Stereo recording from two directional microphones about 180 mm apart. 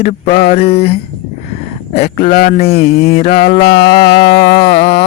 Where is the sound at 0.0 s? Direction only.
40° left (ahead or behind).